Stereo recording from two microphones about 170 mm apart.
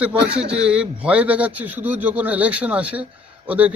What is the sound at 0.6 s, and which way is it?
A man's voice, 5° right (ahead or behind).